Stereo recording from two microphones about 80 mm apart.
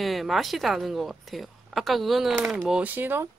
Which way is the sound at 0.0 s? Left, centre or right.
Centre.